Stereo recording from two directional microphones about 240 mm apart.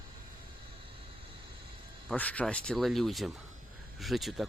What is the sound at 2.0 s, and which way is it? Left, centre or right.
Speech, centre.